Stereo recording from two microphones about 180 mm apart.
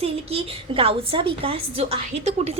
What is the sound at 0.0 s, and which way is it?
A woman's voice, 35° right (ahead or behind).